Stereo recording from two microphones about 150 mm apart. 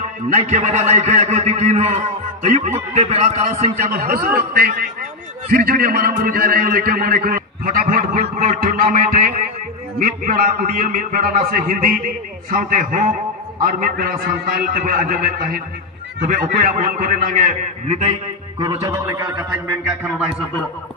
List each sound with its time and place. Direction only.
0.3 s a man's voice: 55° right (ahead or behind)
3.9 s a man's voice: 80° right; by 18.0 s 60° right (ahead or behind)
18.6 s a man's voice: 40° right (ahead or behind)
20.0 s speech: 5° right (ahead or behind)